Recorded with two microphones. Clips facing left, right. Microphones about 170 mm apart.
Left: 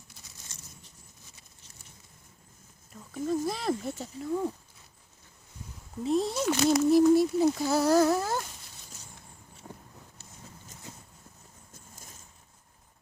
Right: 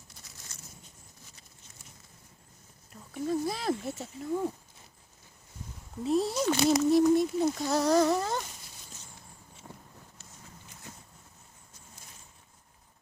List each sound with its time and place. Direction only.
3.2 s speech: centre (ahead or behind)
6.0 s speech: centre (ahead or behind)
11.7 s vehicle: 45° left (ahead or behind)